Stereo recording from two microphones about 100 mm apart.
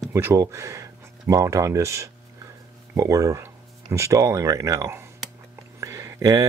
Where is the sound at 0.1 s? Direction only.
25° right (ahead or behind).